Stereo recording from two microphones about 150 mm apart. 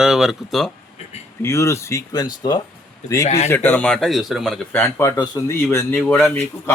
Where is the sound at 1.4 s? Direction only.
20° left (ahead or behind).